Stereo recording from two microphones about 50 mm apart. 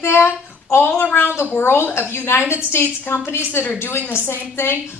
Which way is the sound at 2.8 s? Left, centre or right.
Left.